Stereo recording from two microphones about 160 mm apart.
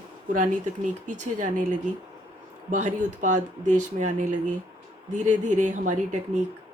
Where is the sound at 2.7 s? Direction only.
50° right (ahead or behind).